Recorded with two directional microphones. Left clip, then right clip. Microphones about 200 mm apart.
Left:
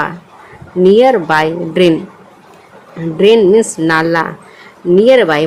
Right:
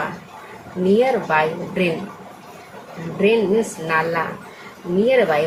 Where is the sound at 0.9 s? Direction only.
50° left (ahead or behind).